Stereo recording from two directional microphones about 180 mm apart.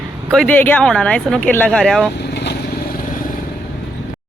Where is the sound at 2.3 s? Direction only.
60° left (ahead or behind).